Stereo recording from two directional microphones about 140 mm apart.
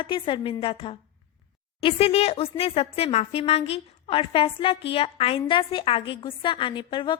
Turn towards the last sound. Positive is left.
turn(degrees=35)  # may be behind; listen again after turning